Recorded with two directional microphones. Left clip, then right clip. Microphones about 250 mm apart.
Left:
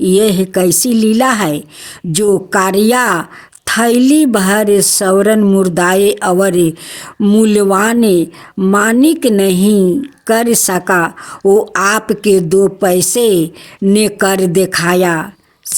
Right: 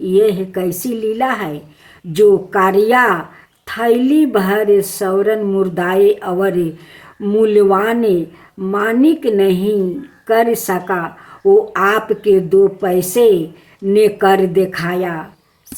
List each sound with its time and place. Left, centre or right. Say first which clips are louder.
0.0 s a woman's voice: left 2 dB; left